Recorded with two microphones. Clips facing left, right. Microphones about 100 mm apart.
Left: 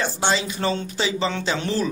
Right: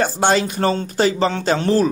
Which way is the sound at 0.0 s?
50° right (ahead or behind).